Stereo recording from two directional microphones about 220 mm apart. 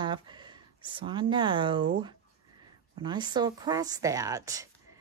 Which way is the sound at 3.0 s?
20° right (ahead or behind).